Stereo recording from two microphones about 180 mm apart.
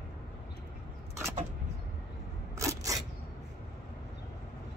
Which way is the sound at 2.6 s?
15° right (ahead or behind).